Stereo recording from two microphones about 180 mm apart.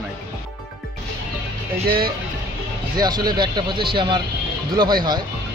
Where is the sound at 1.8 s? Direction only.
55° right (ahead or behind).